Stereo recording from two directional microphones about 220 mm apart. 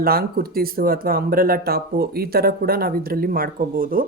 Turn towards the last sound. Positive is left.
turn(degrees=-40)  # may be behind; listen again after turning